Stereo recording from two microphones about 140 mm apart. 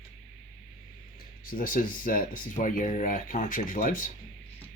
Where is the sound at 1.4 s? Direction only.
85° left.